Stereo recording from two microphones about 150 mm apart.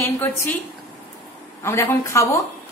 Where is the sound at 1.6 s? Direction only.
20° left (ahead or behind).